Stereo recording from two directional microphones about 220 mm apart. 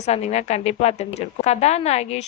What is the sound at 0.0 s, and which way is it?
Speech, 30° left (ahead or behind).